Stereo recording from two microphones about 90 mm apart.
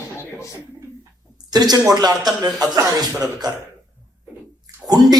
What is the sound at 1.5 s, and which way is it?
Speech, 45° right (ahead or behind).